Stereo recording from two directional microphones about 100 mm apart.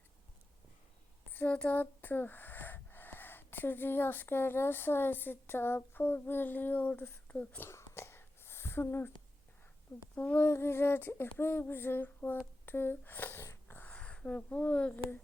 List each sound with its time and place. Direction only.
1.3 s speech: 15° left (ahead or behind)
7.7 s a sound: 25° left (ahead or behind)
10.2 s speech: 15° left (ahead or behind)